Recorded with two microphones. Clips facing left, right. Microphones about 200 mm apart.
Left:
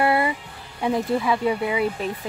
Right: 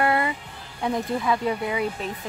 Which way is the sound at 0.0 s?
10° left (ahead or behind).